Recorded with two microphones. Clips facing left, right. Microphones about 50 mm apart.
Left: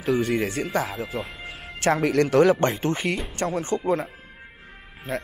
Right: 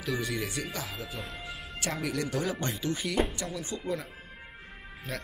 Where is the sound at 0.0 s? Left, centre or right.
Left.